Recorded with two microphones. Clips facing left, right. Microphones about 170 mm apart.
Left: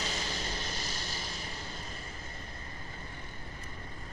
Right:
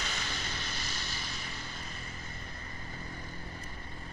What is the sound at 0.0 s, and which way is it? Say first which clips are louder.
Vehicle: left 3 dB; 35° left (ahead or behind).